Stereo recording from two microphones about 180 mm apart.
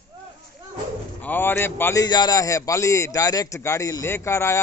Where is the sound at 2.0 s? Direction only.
20° left (ahead or behind).